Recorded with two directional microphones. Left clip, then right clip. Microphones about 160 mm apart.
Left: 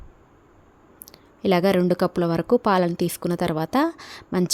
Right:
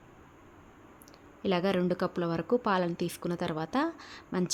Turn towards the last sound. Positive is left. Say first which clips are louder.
# left 8 dB
turn(degrees=55)  # may be behind; listen again after turning